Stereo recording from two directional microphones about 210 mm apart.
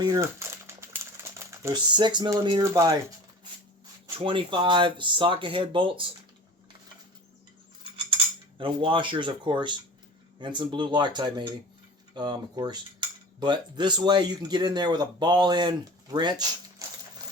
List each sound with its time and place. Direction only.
0.0 s a sound: 15° right (ahead or behind)
4.0 s cutlery: 25° right (ahead or behind)
7.9 s cutlery: 25° right (ahead or behind)